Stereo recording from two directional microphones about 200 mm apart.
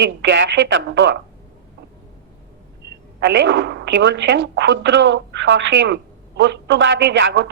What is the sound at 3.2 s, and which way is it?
A woman's voice, 65° right (ahead or behind).